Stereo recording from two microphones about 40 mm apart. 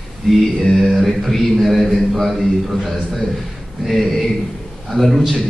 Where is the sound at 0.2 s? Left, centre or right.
Centre.